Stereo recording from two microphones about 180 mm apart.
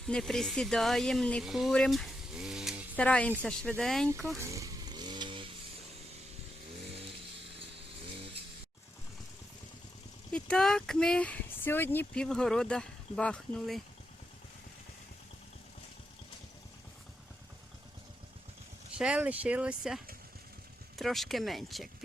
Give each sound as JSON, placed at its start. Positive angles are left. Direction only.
{"t": 0.0, "sound": "speech", "side_deg": 0}
{"t": 4.4, "sound": "vehicle", "side_deg": -15}
{"t": 10.3, "sound": "speech", "side_deg": 5}
{"t": 18.9, "sound": "speech", "side_deg": -5}
{"t": 21.0, "sound": "speech", "side_deg": 0}